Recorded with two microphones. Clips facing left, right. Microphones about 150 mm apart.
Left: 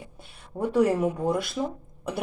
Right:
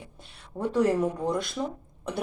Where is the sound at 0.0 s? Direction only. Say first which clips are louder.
Left 2 dB; 10° left (ahead or behind).